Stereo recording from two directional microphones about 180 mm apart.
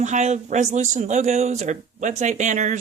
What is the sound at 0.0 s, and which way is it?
Speech, 40° right (ahead or behind).